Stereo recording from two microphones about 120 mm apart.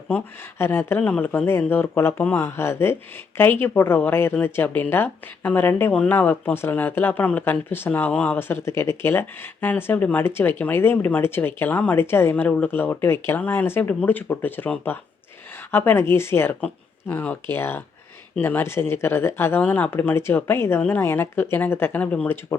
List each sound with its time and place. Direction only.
0.6 s speech: 20° left (ahead or behind)